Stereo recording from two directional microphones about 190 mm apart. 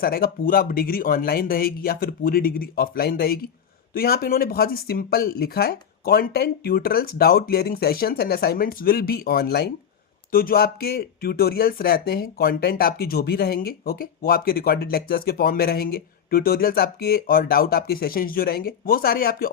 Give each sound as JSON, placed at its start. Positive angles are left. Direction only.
{"t": 0.0, "sound": "speech", "side_deg": 50}